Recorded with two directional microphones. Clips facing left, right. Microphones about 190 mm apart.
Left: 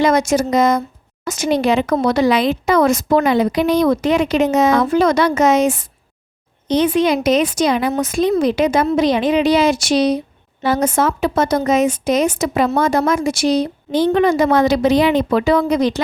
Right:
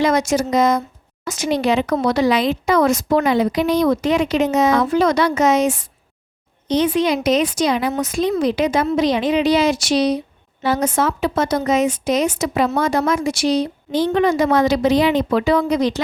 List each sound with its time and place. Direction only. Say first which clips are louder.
0.0 s a woman's voice: left 2 dB; 50° left (ahead or behind)